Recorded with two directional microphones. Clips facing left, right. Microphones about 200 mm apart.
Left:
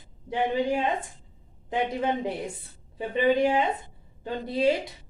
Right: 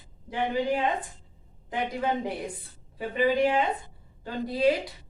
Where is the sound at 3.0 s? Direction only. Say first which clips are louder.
Left 1 dB; 20° left (ahead or behind).